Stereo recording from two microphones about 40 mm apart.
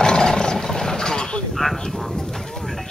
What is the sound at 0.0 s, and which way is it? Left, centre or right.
Roaring cats, centre.